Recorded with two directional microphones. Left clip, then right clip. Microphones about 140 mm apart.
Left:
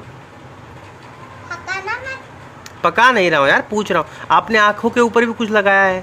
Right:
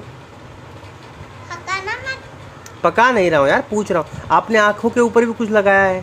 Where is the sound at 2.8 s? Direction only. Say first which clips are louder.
Left 1 dB; 15° right (ahead or behind).